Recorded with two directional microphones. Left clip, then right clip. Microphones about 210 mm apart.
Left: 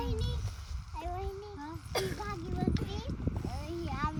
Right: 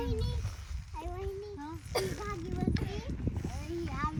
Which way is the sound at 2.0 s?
40° left (ahead or behind).